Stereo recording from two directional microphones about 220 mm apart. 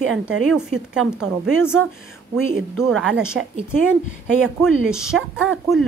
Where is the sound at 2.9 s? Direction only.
5° right (ahead or behind).